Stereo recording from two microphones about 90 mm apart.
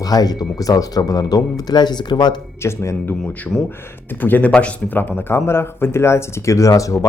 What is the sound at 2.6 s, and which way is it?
Speech, 30° left (ahead or behind).